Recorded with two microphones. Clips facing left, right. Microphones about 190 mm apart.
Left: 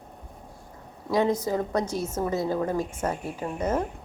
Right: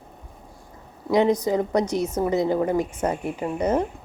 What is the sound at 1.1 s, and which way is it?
A woman's voice, 20° right (ahead or behind).